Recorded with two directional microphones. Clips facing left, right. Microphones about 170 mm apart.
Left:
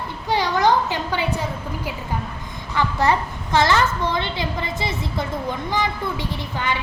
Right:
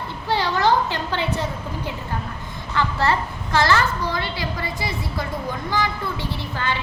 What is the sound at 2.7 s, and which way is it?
A child's voice, 15° left (ahead or behind).